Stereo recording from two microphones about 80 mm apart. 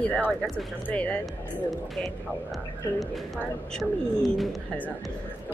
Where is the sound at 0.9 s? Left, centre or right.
Centre.